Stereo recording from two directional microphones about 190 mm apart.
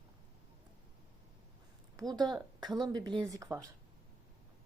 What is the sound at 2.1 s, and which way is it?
Speech, 20° right (ahead or behind).